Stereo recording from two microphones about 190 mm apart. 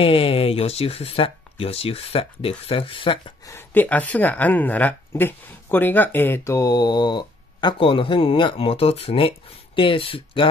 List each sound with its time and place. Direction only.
0.0 s speech: 30° left (ahead or behind)
3.5 s speech: 10° left (ahead or behind); by 10.5 s 30° left (ahead or behind)